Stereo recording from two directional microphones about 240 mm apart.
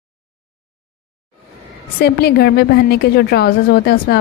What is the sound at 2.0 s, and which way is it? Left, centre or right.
A woman's voice, left.